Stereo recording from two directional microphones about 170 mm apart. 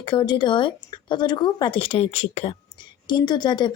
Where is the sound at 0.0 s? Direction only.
25° left (ahead or behind).